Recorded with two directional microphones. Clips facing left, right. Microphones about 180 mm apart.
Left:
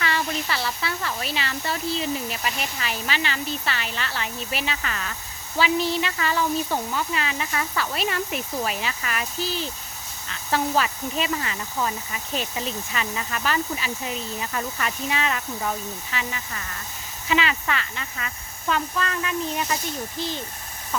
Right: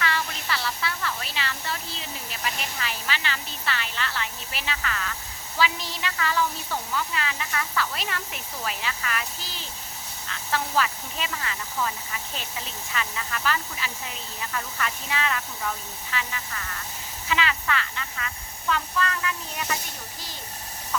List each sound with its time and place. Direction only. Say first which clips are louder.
0.0 s speech: left 3 dB; 15° left (ahead or behind)
12.9 s speech: left 3 dB; 20° left (ahead or behind)
17.2 s speech: left 3 dB; 20° left (ahead or behind)